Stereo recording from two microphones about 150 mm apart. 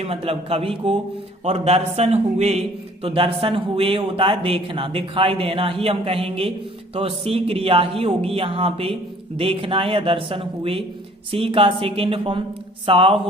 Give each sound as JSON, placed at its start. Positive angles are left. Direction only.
{"t": 0.0, "sound": "a man's voice", "side_deg": -40}